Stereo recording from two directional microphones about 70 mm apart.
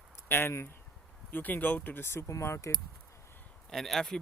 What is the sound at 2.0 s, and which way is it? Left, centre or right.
Speech, left.